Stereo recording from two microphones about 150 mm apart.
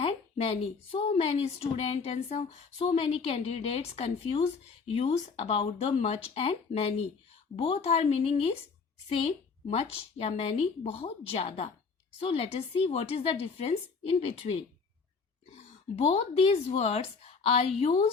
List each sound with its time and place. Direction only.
0.0 s a woman's voice: 40° left (ahead or behind)
16.0 s speech: 45° left (ahead or behind)